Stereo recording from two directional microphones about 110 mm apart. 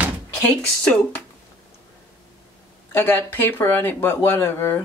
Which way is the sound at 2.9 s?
20° left (ahead or behind).